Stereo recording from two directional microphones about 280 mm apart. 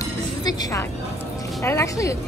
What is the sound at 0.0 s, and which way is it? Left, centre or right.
Music, centre.